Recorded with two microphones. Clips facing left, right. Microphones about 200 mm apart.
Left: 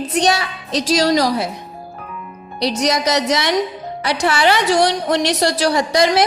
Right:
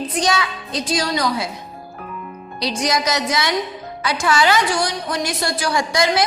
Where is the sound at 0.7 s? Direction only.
90° left.